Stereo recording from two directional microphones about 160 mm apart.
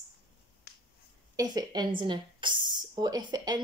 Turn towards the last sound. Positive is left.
turn(degrees=-25)  # may be behind; listen again after turning